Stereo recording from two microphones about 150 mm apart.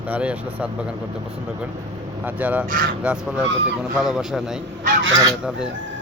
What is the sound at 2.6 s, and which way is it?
Speech, 70° right (ahead or behind).